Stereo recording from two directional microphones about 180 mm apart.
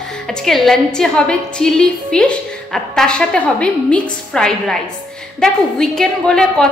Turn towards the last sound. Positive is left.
turn(degrees=5)  # may be behind; listen again after turning